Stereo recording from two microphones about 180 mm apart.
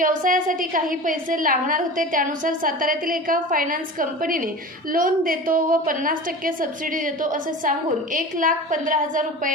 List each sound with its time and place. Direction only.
0.0 s a woman's voice: 50° right (ahead or behind)